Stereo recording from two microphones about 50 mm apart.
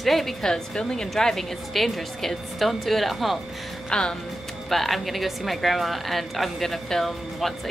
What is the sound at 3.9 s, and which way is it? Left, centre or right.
Speech, centre.